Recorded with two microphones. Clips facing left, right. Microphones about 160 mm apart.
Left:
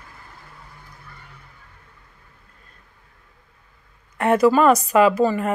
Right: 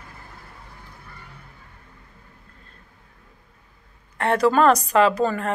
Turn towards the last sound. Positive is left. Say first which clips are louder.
# left 3 dB
turn(degrees=5)  # may be behind; listen again after turning